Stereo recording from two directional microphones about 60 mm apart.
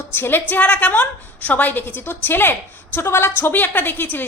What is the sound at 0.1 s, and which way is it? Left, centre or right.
Speech, left.